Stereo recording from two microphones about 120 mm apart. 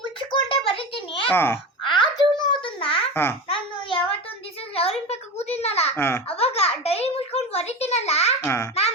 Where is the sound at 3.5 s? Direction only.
50° left (ahead or behind).